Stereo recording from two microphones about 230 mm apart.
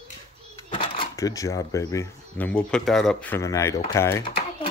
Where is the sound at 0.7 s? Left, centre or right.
Left.